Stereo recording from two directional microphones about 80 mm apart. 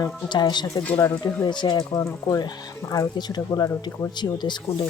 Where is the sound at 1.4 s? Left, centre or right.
Left.